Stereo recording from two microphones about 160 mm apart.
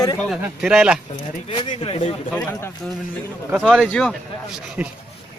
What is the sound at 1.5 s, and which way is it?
Speech, 35° left (ahead or behind).